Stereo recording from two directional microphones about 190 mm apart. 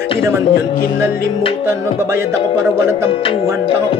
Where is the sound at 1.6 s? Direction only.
15° right (ahead or behind).